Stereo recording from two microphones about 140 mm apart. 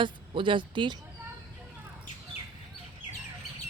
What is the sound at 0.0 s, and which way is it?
Speech, 35° right (ahead or behind).